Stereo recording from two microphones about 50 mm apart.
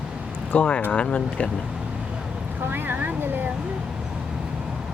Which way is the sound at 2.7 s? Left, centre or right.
Right.